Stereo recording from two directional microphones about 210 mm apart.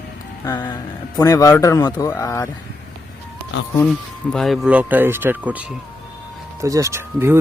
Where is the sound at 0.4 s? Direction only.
20° left (ahead or behind).